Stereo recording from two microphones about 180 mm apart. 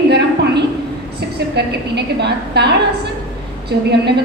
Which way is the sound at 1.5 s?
70° right (ahead or behind).